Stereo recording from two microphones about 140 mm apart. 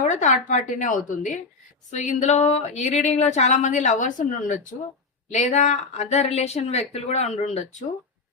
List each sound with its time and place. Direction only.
0.0 s speech: 60° left (ahead or behind)